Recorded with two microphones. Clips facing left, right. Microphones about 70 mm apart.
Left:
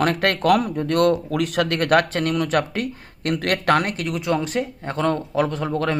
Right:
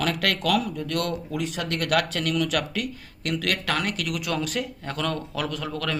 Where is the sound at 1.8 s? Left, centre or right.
Left.